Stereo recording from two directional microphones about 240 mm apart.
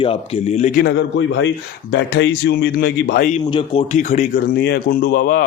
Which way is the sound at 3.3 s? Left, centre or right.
Left.